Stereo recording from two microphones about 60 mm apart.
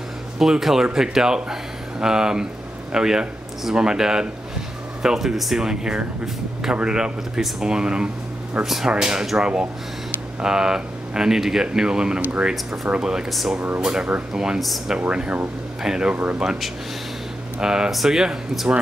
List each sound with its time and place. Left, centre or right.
0.4 s speech: centre
12.2 s speech: right
13.3 s speech: centre
17.6 s speech: centre